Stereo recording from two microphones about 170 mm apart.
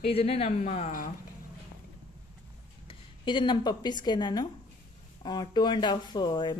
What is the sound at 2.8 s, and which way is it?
Speech, 30° left (ahead or behind).